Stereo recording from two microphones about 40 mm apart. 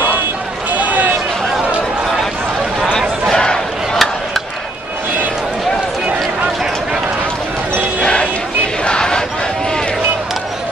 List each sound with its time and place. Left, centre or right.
3.3 s a sound: centre
8.0 s music: left
8.8 s crowd: centre